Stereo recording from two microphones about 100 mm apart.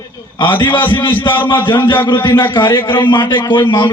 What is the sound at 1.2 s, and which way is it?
A man's voice, 55° left (ahead or behind).